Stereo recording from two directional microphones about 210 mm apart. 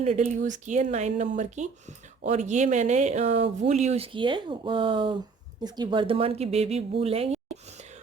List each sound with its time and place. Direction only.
0.0 s speech: 35° right (ahead or behind)